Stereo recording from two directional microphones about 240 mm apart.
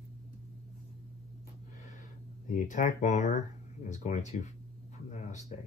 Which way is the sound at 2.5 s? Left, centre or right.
Left.